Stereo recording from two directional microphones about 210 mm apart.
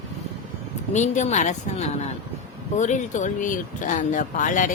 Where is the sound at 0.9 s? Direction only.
35° left (ahead or behind).